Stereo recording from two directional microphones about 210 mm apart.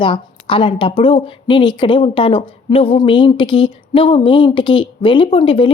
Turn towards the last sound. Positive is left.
turn(degrees=25)  # may be behind; listen again after turning